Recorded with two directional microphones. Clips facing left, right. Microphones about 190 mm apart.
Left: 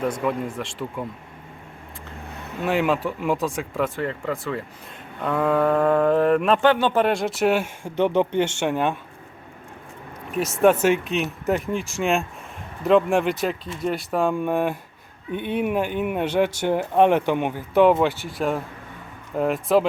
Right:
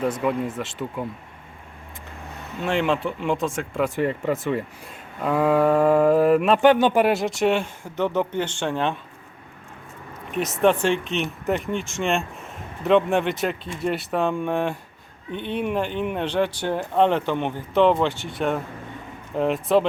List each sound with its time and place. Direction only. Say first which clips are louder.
0.0 s speech: right 1 dB; 5° right (ahead or behind)
2.6 s speech: left 1 dB; 5° left (ahead or behind)
3.9 s speech: right 4 dB; 15° right (ahead or behind)
5.2 s speech: right 2 dB; 5° right (ahead or behind)
6.6 s speech: right 2 dB; 15° right (ahead or behind); by 7.7 s 5° left (ahead or behind)
7.9 s speech: left 3 dB; 20° left (ahead or behind)
10.3 s speech: left 2 dB; 5° left (ahead or behind)